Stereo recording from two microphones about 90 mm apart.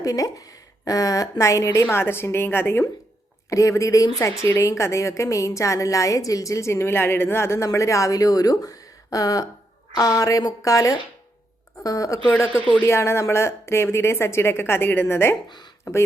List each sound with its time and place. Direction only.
0.0 s a woman's voice: 40° left (ahead or behind); by 2.8 s 25° left (ahead or behind)
3.5 s a woman's voice: 35° left (ahead or behind)